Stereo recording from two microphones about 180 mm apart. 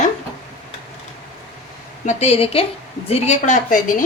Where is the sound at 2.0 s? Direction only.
35° left (ahead or behind).